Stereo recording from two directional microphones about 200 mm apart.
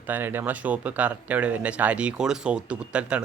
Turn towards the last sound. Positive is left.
turn(degrees=-5)  # may be behind; listen again after turning